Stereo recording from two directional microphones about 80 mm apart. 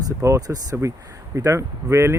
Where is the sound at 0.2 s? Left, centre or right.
Right.